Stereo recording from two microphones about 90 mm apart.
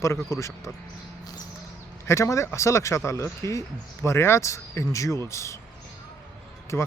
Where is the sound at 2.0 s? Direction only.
35° left (ahead or behind).